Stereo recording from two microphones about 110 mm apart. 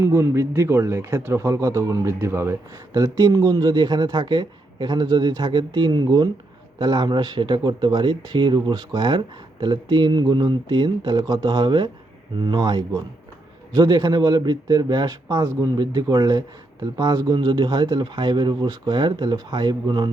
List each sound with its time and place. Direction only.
0.0 s speech: 25° right (ahead or behind); by 20.1 s 40° right (ahead or behind)